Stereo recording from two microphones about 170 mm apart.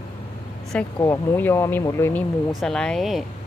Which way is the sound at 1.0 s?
15° left (ahead or behind).